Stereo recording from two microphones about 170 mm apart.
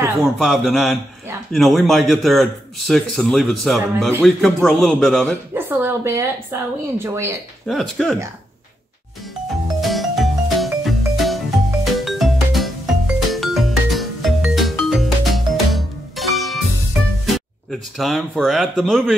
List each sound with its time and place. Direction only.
0.2 s a man's voice: centre (ahead or behind)
5.5 s a woman's voice: 15° right (ahead or behind)
7.6 s a man's voice: centre (ahead or behind)
9.8 s music: centre (ahead or behind)
17.6 s a man's voice: centre (ahead or behind)